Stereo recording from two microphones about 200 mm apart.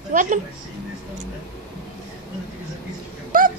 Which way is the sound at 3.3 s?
40° right (ahead or behind).